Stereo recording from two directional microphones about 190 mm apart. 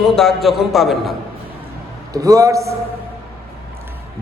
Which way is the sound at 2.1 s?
15° right (ahead or behind).